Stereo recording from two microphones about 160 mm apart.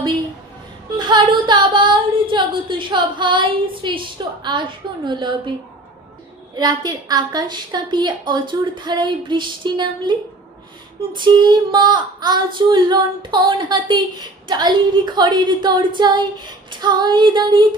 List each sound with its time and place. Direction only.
0.9 s speech: 30° right (ahead or behind)
5.0 s female singing: 30° right (ahead or behind)
6.6 s female singing: 25° right (ahead or behind)